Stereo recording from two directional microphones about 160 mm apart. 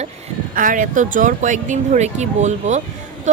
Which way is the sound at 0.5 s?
55° right (ahead or behind).